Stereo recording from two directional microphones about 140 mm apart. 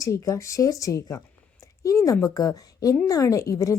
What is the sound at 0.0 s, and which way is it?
A woman's voice, 25° left (ahead or behind).